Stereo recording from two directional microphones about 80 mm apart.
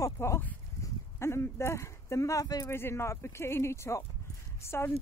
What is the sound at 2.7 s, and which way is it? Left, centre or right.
Speech, left.